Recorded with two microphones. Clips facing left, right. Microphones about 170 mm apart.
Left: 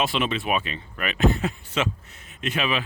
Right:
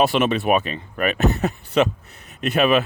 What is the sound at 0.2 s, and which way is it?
Speech, 45° right (ahead or behind).